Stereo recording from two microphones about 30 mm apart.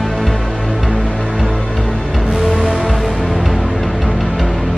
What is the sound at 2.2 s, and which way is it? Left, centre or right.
Music, centre.